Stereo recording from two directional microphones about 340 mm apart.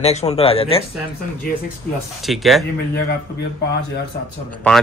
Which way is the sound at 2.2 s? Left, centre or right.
Centre.